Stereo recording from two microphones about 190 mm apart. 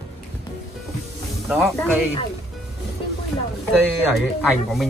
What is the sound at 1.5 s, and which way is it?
Speech, 5° right (ahead or behind).